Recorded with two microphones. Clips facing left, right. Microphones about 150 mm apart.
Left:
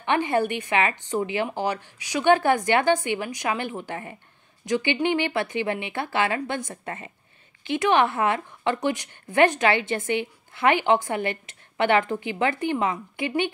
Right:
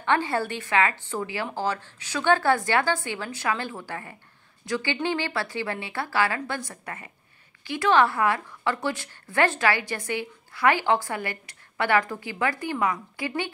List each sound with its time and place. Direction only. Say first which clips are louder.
0.0 s speech: left 2 dB; 20° left (ahead or behind)